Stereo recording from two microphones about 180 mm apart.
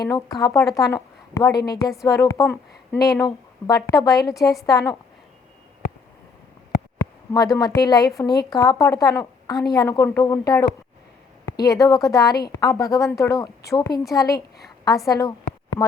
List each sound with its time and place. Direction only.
0.0 s a woman's voice: 20° left (ahead or behind)
7.3 s a woman's voice: 20° left (ahead or behind)
15.7 s a sound: 15° left (ahead or behind)